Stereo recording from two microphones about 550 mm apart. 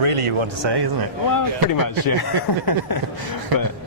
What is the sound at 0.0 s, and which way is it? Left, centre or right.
Speech, right.